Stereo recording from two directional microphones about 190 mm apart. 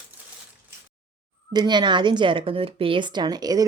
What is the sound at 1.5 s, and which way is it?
A woman's voice, 25° right (ahead or behind).